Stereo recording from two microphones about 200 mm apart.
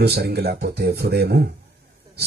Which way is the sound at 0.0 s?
55° right (ahead or behind).